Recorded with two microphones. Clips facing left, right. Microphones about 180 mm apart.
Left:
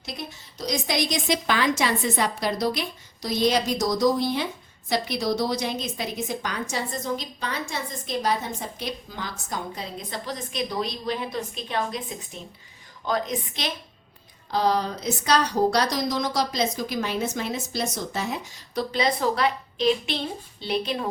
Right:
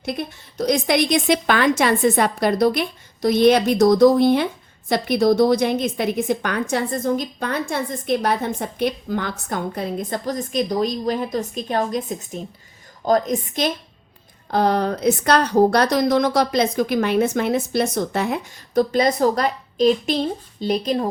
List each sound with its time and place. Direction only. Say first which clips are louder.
0.0 s a woman's voice: right 9 dB; 55° right (ahead or behind)
14.5 s a woman's voice: right 5 dB; 55° right (ahead or behind); by 21.1 s 40° right (ahead or behind)